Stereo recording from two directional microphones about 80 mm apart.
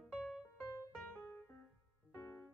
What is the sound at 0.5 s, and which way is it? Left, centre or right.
Keyboard, left.